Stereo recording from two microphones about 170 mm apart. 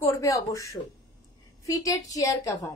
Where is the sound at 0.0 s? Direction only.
20° left (ahead or behind).